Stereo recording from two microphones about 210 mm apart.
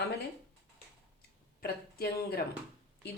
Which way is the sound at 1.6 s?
50° left (ahead or behind).